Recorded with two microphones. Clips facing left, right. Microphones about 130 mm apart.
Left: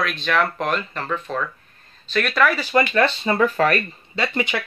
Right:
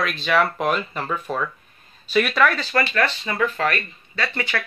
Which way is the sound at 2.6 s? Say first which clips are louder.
Left 4 dB; 15° left (ahead or behind).